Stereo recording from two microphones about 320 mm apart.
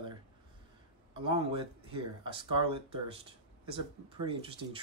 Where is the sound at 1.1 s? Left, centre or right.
Centre.